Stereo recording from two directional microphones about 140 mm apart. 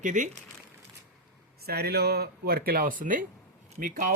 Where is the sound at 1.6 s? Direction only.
90° right; by 3.2 s 70° right (ahead or behind).